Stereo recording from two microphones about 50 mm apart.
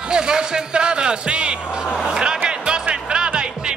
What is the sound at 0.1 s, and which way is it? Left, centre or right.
Music, centre.